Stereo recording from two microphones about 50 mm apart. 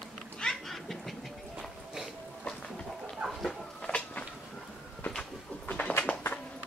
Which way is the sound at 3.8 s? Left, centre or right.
Left.